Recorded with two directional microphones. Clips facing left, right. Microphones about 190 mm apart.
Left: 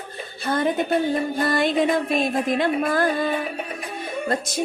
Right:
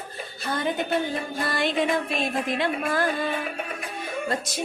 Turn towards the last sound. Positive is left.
turn(degrees=45)  # may be behind; listen again after turning